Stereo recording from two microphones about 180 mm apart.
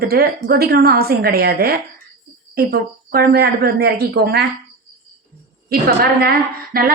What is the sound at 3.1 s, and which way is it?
A woman's voice, 60° right (ahead or behind).